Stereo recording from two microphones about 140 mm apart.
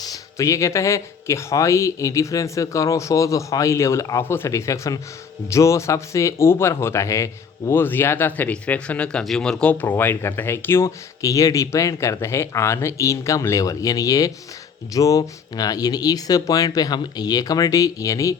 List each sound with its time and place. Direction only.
0.0 s speech: 25° left (ahead or behind)